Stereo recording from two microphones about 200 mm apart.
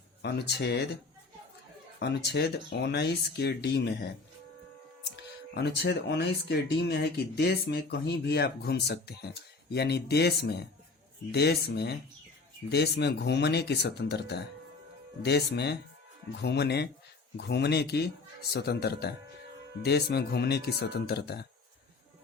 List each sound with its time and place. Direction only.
0.2 s speech: 55° left (ahead or behind)
2.0 s speech: 55° left (ahead or behind)
5.1 s a man's voice: 55° left (ahead or behind)